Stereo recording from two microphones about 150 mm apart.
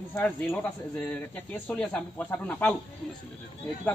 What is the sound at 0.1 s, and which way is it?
Speech, 10° left (ahead or behind).